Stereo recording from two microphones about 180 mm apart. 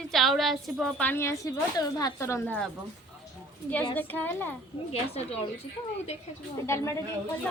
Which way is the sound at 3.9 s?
10° left (ahead or behind).